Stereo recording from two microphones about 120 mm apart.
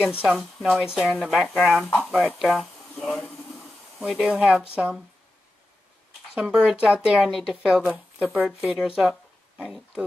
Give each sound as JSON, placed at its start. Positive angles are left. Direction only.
{"t": 0.2, "sound": "speech", "side_deg": 0}
{"t": 2.0, "sound": "a sound", "side_deg": 0}
{"t": 4.0, "sound": "speech", "side_deg": -5}
{"t": 6.3, "sound": "speech", "side_deg": -5}